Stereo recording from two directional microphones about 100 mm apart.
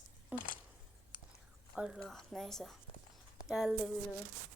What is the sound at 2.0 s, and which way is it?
Speech, 5° left (ahead or behind).